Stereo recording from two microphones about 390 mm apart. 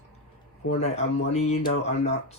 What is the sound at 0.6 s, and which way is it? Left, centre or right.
A man's voice, left.